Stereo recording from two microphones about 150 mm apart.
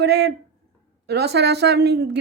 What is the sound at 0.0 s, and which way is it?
Speech, 90° right.